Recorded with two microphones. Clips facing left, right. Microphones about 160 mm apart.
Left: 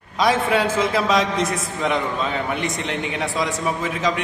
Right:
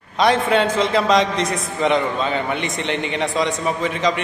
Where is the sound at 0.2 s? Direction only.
5° left (ahead or behind).